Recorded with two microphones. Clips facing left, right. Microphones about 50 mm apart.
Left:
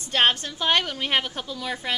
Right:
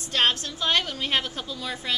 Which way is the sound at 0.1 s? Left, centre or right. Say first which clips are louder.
Left 2 dB; left.